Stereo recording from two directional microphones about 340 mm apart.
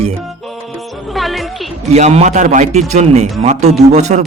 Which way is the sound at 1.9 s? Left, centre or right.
Centre.